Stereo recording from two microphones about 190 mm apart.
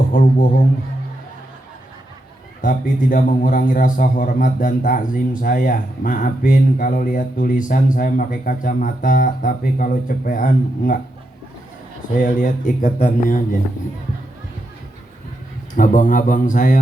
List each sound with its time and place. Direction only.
0.1 s a man's voice: 45° left (ahead or behind)
2.6 s a man's voice: 45° left (ahead or behind)
12.1 s a man's voice: 45° left (ahead or behind)
15.7 s a man's voice: 40° left (ahead or behind)